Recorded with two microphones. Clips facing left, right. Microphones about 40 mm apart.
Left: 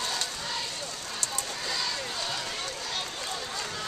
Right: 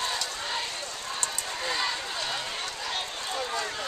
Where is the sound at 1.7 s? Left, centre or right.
Right.